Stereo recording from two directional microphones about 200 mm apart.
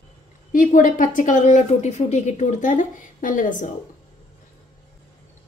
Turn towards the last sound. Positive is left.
turn(degrees=40)  # may be behind; listen again after turning